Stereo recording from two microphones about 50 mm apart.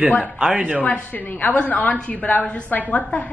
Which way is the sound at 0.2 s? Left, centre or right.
Centre.